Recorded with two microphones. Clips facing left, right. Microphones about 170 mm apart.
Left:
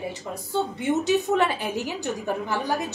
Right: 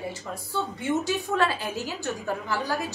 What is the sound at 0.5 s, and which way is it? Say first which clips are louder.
A woman's voice: left 3 dB; 20° left (ahead or behind).